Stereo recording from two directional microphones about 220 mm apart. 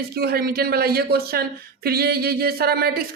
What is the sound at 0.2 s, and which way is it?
Speech, 45° right (ahead or behind).